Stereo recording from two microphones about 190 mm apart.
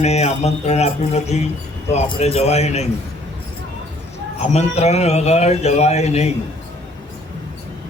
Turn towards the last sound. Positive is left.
turn(degrees=35)  # may be behind; listen again after turning